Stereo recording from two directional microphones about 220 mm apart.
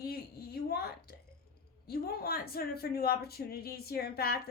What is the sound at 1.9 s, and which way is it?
Speech, 45° left (ahead or behind).